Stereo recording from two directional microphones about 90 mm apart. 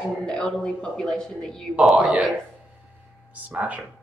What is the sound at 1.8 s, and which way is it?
Speech, 10° right (ahead or behind).